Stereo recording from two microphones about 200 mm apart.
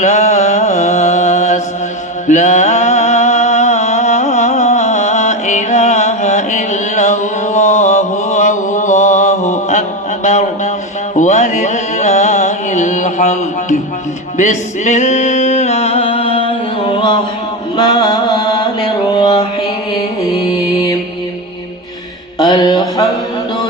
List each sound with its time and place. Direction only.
0.0 s mantra: 35° left (ahead or behind)
2.2 s music: 35° left (ahead or behind)
10.2 s a sound: 35° left (ahead or behind)
11.1 s music: 35° left (ahead or behind)
17.7 s mantra: 20° left (ahead or behind)
22.4 s music: 20° left (ahead or behind)